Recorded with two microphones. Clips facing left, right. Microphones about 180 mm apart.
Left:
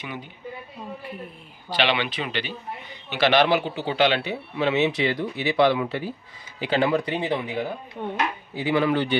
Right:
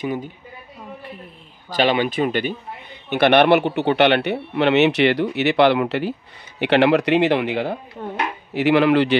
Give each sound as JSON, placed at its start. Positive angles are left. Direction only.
{"t": 0.0, "sound": "a man's voice", "side_deg": -40}
{"t": 1.7, "sound": "a man's voice", "side_deg": -45}
{"t": 3.1, "sound": "speech", "side_deg": -60}